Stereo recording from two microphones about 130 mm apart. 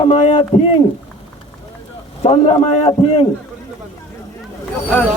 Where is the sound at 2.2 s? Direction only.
55° left (ahead or behind).